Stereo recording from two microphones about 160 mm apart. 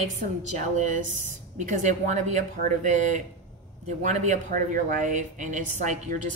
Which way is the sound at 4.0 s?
50° right (ahead or behind).